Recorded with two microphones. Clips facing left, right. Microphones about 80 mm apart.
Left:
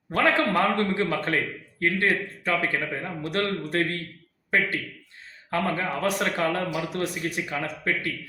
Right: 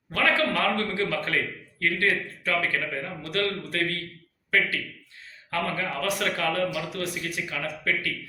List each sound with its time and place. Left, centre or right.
0.1 s a man's voice: left
5.5 s speech: left